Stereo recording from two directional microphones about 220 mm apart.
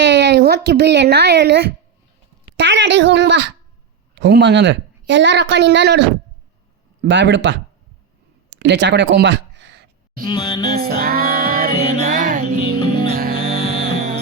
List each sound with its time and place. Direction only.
0.0 s a woman's voice: 50° right (ahead or behind)
8.4 s a sound: 50° right (ahead or behind)
10.2 s music: 20° left (ahead or behind)
10.8 s music: 40° right (ahead or behind)